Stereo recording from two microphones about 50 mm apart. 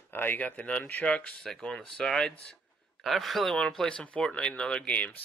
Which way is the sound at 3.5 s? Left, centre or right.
Centre.